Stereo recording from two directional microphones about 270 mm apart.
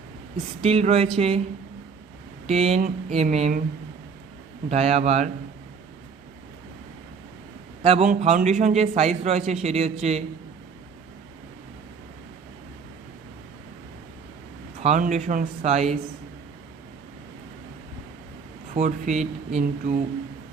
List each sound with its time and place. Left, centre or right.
0.6 s speech: right
2.5 s speech: right
4.7 s speech: right
7.8 s a man's voice: right
14.8 s speech: right
18.7 s speech: right